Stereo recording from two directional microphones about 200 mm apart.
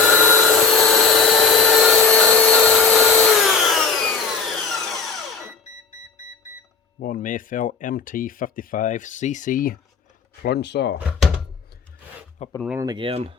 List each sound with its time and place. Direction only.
0.3 s wood: centre (ahead or behind)
7.0 s speech: 40° left (ahead or behind)
10.4 s speech: 55° left (ahead or behind)
12.4 s speech: 30° left (ahead or behind)
12.8 s speech: 25° right (ahead or behind)